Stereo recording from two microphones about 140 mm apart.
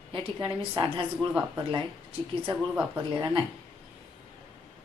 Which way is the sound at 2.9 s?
30° right (ahead or behind).